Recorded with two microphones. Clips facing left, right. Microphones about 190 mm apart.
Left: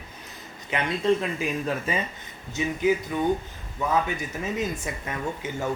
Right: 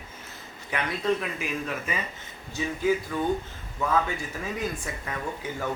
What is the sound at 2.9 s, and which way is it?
Speech, 20° left (ahead or behind).